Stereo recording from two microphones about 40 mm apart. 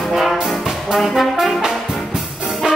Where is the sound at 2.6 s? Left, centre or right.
Right.